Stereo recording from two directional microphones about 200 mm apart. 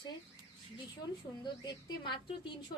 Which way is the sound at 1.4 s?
25° left (ahead or behind).